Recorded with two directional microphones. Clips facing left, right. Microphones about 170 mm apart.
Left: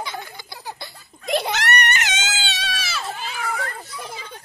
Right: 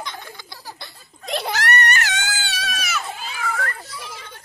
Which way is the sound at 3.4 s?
5° left (ahead or behind).